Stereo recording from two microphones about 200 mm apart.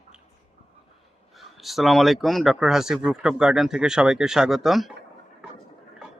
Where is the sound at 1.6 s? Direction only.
Centre (ahead or behind).